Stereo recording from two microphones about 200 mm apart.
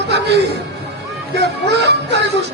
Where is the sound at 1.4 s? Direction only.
55° right (ahead or behind).